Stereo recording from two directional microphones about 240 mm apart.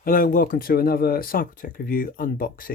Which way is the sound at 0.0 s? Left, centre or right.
Left.